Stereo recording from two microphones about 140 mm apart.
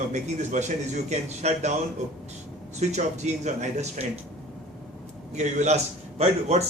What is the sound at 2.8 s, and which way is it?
A man's voice, 55° right (ahead or behind).